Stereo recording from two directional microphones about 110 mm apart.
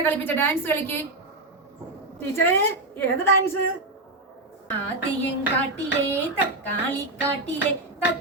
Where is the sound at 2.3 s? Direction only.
20° left (ahead or behind).